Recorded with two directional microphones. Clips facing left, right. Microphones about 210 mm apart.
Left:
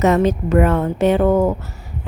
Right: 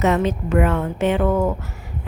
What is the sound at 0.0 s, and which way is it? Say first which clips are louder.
A woman's voice: left 4 dB; 40° left (ahead or behind).